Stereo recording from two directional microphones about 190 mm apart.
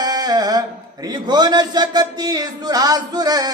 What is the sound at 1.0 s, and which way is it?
A man's voice, 20° right (ahead or behind).